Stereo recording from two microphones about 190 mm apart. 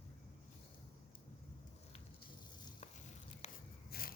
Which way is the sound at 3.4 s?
35° left (ahead or behind).